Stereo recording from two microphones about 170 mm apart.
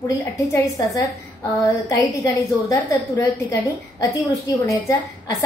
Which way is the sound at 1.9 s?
20° left (ahead or behind).